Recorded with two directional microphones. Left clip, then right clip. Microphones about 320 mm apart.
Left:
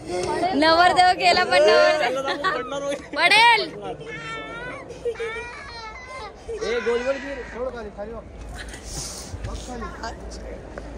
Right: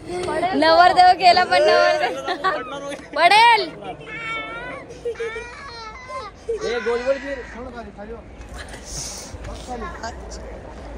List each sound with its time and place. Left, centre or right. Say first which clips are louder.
0.1 s a sound: right 1 dB; centre
0.6 s a woman's voice: right 3 dB; centre
2.7 s speech: left 3 dB; centre
3.2 s a woman's voice: right 3 dB; centre
3.8 s a sound: right 2 dB; left
5.1 s speech: right 1 dB; centre